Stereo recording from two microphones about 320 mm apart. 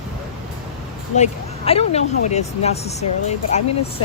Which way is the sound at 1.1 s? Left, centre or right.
Centre.